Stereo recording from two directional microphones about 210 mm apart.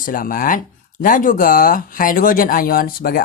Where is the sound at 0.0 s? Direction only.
40° left (ahead or behind).